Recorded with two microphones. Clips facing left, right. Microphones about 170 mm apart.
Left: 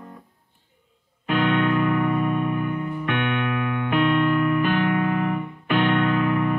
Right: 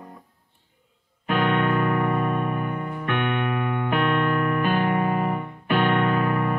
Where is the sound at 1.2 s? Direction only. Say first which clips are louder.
Left 1 dB; 50° right (ahead or behind).